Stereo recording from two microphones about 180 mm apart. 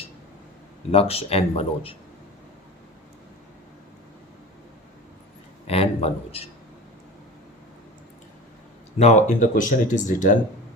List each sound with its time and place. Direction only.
0.9 s speech: 35° left (ahead or behind)
5.6 s a man's voice: 35° left (ahead or behind)
9.0 s speech: 40° left (ahead or behind)